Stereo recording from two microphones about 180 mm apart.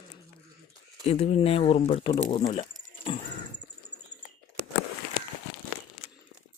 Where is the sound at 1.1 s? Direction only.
35° left (ahead or behind).